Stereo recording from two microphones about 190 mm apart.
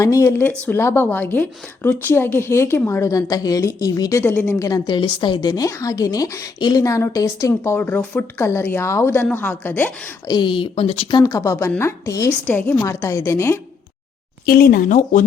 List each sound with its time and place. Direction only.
0.0 s a woman's voice: 15° left (ahead or behind)
10.2 s speech: 25° left (ahead or behind)
11.2 s a woman's voice: 15° left (ahead or behind)
14.4 s speech: 50° left (ahead or behind)